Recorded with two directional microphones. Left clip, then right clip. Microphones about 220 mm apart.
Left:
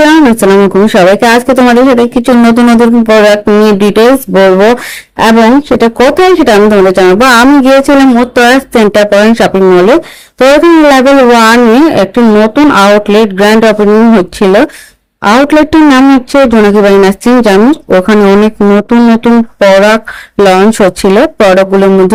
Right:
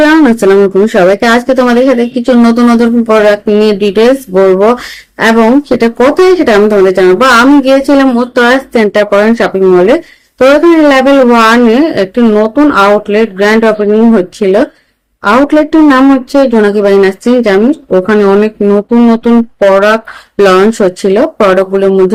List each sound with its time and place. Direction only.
0.0 s speech: 25° left (ahead or behind)